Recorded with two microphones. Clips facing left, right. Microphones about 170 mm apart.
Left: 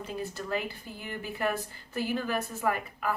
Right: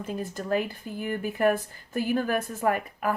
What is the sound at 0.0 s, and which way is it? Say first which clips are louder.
Speech: right 3 dB; 50° right (ahead or behind).